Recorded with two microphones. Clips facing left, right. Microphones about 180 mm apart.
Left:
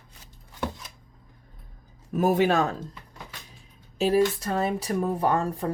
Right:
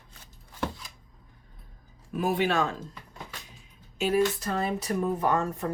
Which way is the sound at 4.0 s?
35° left (ahead or behind).